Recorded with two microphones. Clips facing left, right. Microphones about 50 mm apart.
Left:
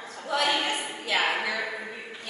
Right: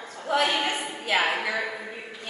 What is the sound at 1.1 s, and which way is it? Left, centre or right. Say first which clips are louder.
Speech: right 1 dB; centre.